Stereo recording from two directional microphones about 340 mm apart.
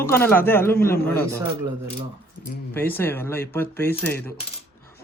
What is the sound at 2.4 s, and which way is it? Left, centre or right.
Speech, left.